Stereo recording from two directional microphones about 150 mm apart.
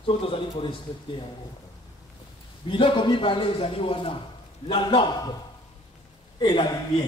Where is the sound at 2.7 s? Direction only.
35° left (ahead or behind).